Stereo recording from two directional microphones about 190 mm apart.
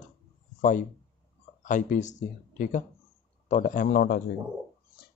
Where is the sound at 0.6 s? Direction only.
40° left (ahead or behind).